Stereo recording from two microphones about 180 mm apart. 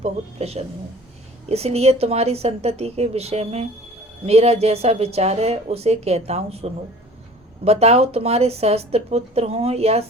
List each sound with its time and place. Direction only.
0.0 s a woman's voice: 35° right (ahead or behind)